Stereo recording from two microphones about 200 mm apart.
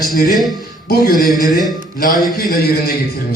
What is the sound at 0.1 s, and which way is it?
A man's voice, 45° left (ahead or behind).